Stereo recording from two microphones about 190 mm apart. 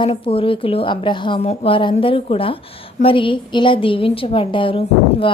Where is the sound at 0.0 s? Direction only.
30° left (ahead or behind).